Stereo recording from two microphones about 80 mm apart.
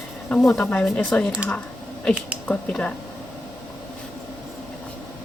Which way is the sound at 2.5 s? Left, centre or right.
Centre.